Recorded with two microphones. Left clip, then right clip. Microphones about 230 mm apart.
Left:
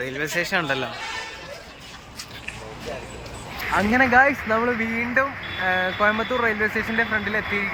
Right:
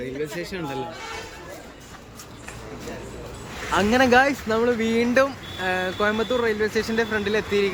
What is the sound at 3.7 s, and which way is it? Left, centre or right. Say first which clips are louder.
Speech: even; right.